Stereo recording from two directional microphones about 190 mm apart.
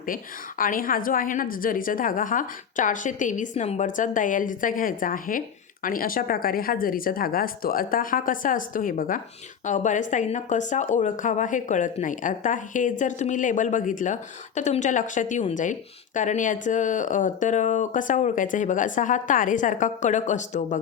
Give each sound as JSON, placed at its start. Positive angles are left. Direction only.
{"t": 0.6, "sound": "a woman's voice", "side_deg": 45}